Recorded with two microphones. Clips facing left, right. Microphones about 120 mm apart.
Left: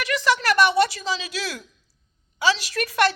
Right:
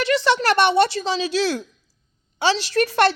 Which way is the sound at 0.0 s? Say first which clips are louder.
Right 4 dB; 30° right (ahead or behind).